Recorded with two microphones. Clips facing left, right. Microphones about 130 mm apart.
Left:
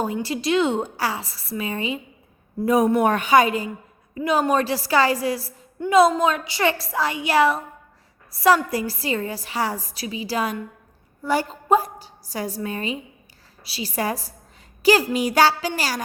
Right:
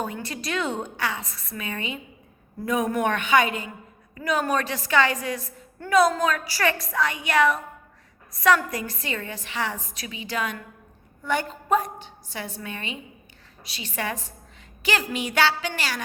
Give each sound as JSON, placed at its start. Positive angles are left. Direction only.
{"t": 0.0, "sound": "a woman's voice", "side_deg": 30}
{"t": 4.1, "sound": "a woman's voice", "side_deg": 25}